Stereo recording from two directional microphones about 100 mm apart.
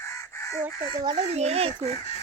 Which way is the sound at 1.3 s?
90° right.